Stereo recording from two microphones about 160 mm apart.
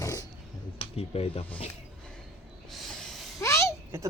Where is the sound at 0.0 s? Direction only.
20° left (ahead or behind).